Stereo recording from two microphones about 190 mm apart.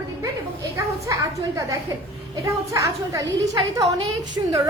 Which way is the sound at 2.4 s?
15° right (ahead or behind).